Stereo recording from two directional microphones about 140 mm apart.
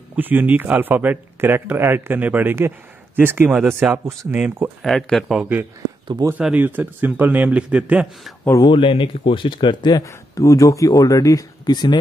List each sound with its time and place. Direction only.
0.1 s speech: 15° right (ahead or behind)
4.8 s a man's voice: centre (ahead or behind)
6.0 s speech: 25° right (ahead or behind)
6.3 s speech: 10° right (ahead or behind)
8.6 s speech: 40° left (ahead or behind)